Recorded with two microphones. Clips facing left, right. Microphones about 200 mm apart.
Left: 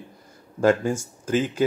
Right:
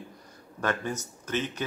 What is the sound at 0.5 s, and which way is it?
Speech, 25° left (ahead or behind).